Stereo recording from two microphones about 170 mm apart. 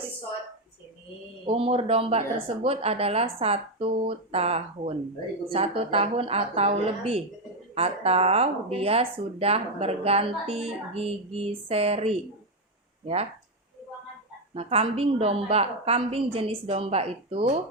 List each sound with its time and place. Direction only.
1.5 s speech: 35° right (ahead or behind)
14.5 s speech: 35° right (ahead or behind)